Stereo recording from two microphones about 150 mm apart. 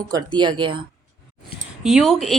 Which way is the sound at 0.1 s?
30° right (ahead or behind).